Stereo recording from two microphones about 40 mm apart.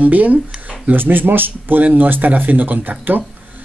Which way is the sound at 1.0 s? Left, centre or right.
Right.